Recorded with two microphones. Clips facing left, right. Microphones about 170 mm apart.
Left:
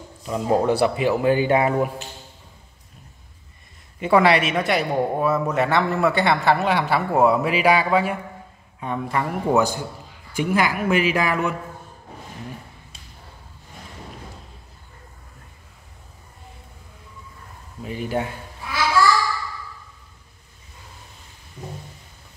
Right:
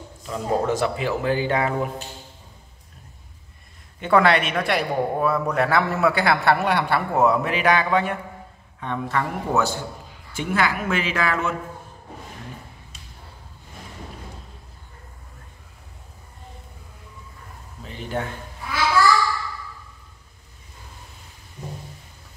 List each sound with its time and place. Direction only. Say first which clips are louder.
0.3 s speech: left 3 dB; 15° left (ahead or behind)
4.0 s speech: left 1 dB; 5° left (ahead or behind)
17.8 s speech: left 4 dB; 10° left (ahead or behind)